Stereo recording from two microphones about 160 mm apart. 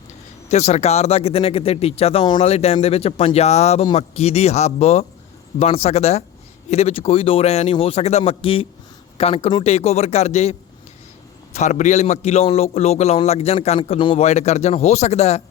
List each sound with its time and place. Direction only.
0.4 s a man's voice: 45° left (ahead or behind)
11.5 s a man's voice: 45° left (ahead or behind)